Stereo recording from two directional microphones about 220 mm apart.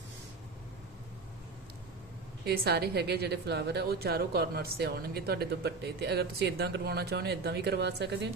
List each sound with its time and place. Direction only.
2.4 s a woman's voice: 45° right (ahead or behind)